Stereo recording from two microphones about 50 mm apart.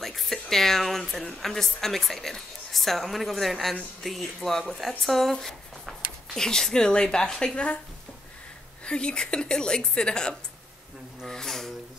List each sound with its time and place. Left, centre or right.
0.0 s a woman's voice: centre; by 7.8 s left
8.8 s speech: centre
11.2 s a sound: centre